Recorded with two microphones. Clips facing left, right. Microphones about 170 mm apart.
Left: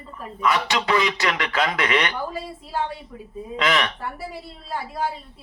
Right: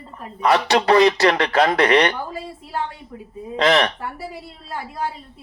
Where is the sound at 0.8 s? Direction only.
35° right (ahead or behind).